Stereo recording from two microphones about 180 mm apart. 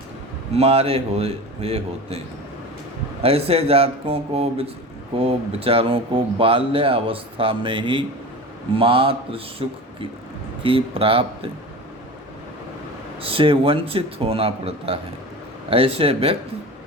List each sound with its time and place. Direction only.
0.5 s speech: 35° right (ahead or behind)
3.2 s speech: 35° right (ahead or behind)
13.2 s speech: 30° right (ahead or behind)